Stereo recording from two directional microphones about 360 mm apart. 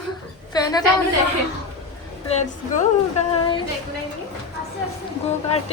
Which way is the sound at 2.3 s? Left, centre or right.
Centre.